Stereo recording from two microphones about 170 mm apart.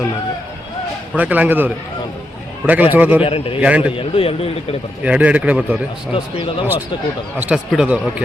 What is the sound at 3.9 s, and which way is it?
Speech, 35° left (ahead or behind).